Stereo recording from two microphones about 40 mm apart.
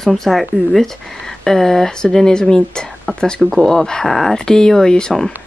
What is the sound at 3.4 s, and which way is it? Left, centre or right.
Speech, centre.